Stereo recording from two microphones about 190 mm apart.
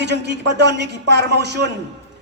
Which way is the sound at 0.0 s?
65° right (ahead or behind).